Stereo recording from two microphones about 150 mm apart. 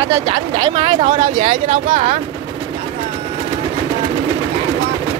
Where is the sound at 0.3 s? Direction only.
45° right (ahead or behind).